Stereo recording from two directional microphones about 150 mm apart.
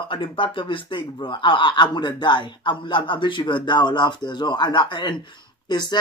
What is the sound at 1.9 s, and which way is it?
Speech, 30° left (ahead or behind).